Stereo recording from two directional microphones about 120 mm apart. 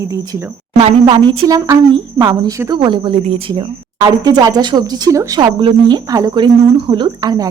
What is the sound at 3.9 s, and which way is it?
A woman's voice, 35° right (ahead or behind).